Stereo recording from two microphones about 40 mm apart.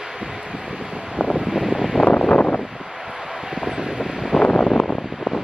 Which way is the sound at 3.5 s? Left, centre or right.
Centre.